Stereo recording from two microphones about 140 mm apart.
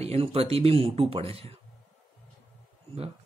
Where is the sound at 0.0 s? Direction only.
45° right (ahead or behind).